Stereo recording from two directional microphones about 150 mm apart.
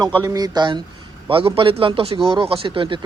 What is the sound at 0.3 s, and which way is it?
Speech, 25° right (ahead or behind).